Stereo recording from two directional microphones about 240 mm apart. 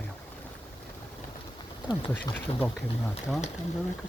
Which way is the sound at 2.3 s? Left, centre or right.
Centre.